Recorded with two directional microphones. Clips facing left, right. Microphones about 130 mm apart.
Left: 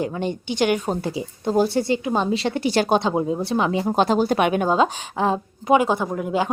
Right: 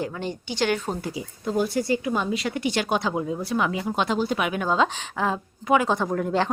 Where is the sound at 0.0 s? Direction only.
20° left (ahead or behind).